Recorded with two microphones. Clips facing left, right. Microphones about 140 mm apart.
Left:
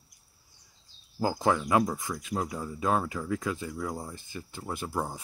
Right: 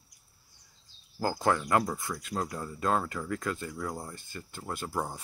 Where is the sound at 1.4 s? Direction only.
5° left (ahead or behind).